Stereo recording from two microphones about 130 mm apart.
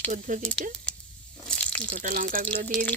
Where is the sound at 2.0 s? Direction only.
90° right.